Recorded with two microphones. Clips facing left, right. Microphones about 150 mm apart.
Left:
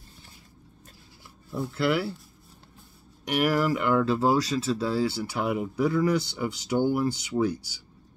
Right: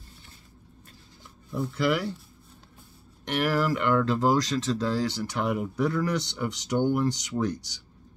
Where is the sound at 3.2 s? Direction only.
10° left (ahead or behind).